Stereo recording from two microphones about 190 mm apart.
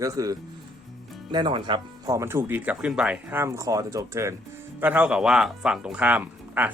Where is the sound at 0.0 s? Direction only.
15° right (ahead or behind).